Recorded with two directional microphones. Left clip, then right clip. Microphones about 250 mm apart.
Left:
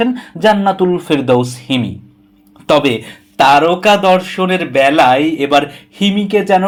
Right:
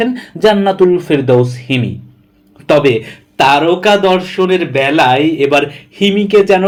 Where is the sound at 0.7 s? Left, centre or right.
Left.